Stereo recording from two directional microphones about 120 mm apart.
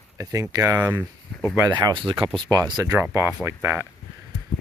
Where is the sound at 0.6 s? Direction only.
15° right (ahead or behind).